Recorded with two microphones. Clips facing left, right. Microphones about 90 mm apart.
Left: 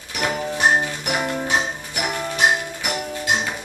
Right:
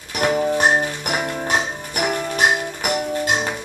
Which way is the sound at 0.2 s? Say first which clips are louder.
Right 5 dB; 45° right (ahead or behind).